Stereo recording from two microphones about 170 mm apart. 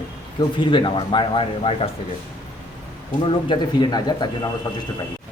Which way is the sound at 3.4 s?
25° left (ahead or behind).